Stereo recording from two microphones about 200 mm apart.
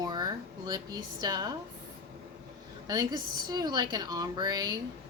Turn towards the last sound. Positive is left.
turn(degrees=-20)  # may be behind; listen again after turning